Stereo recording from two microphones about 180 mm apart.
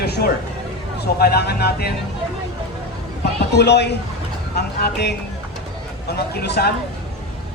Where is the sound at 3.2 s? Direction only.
70° left (ahead or behind).